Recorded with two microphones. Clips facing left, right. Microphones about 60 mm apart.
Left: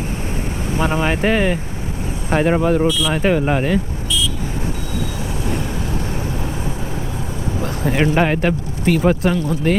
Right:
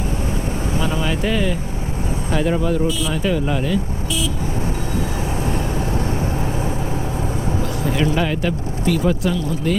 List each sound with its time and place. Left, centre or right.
0.8 s speech: left
7.9 s speech: left